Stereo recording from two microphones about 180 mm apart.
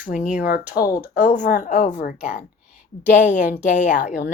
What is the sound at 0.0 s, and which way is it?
Speech, 45° left (ahead or behind).